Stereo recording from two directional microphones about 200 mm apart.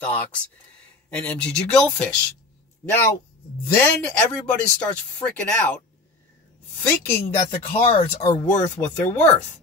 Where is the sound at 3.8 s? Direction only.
5° left (ahead or behind).